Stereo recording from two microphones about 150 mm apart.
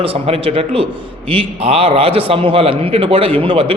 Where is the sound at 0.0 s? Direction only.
40° right (ahead or behind).